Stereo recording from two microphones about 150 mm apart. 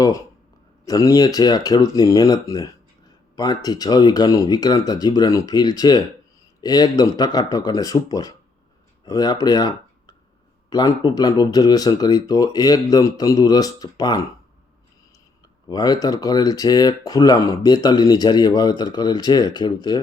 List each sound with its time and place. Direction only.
0.9 s speech: 25° left (ahead or behind)
15.6 s speech: 25° left (ahead or behind)